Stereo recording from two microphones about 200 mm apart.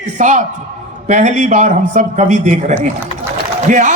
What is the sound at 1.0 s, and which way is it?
A man's voice, 35° right (ahead or behind).